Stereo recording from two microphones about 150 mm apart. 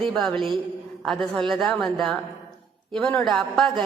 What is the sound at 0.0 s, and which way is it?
A woman's voice, 5° left (ahead or behind).